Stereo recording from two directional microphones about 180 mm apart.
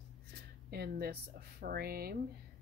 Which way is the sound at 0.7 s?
60° right (ahead or behind).